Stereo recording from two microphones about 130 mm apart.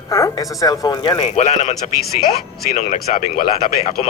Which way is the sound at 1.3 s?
60° left (ahead or behind).